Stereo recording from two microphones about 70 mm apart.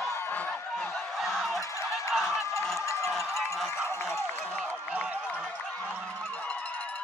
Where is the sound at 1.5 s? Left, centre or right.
Left.